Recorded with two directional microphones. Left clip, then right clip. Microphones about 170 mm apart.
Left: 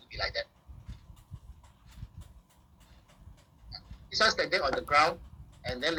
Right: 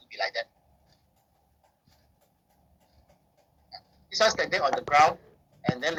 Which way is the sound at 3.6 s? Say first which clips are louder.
Right 1 dB; 15° left (ahead or behind).